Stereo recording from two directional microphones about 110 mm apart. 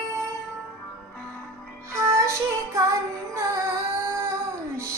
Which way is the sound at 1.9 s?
25° right (ahead or behind).